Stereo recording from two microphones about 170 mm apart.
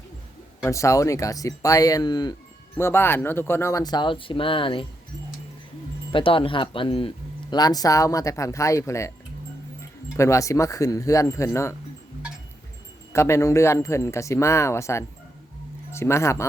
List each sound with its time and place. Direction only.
0.6 s speech: 20° left (ahead or behind)
2.7 s speech: 15° left (ahead or behind); by 4.9 s 30° left (ahead or behind)
6.1 s speech: 30° left (ahead or behind)
10.2 s speech: 15° left (ahead or behind)
13.1 s a man's voice: 15° left (ahead or behind)